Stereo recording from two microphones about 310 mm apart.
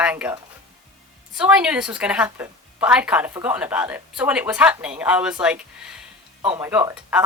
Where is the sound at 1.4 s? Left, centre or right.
Centre.